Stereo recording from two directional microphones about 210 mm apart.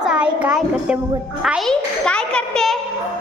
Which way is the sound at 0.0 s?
5° right (ahead or behind).